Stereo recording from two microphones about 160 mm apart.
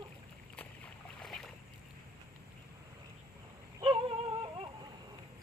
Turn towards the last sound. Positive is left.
turn(degrees=-35)  # may be behind; listen again after turning